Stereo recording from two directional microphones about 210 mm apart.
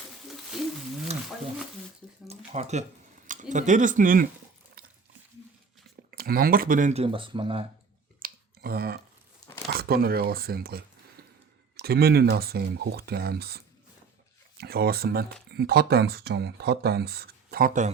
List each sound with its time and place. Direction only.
0.5 s wild animals: centre (ahead or behind)
1.1 s roaring cats: 30° right (ahead or behind)
2.2 s a sound: 30° right (ahead or behind)
3.2 s speech: 35° right (ahead or behind)
6.1 s speech: 45° right (ahead or behind); by 7.6 s 25° right (ahead or behind)
8.2 s a sound: 45° right (ahead or behind)
9.7 s speech: 45° right (ahead or behind)
11.8 s speech: 50° right (ahead or behind)
14.6 s speech: 45° right (ahead or behind)